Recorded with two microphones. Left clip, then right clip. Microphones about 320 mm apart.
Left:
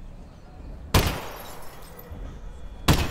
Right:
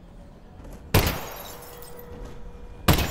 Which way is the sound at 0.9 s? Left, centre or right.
Centre.